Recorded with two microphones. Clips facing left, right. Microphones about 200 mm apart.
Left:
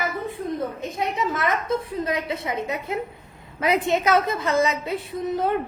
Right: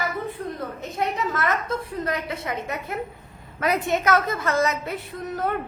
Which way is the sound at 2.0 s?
20° left (ahead or behind).